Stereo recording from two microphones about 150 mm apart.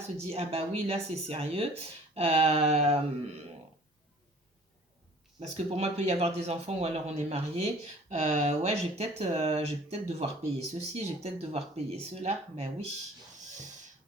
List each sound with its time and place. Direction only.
0.3 s speech: 40° right (ahead or behind)
5.4 s speech: 45° right (ahead or behind)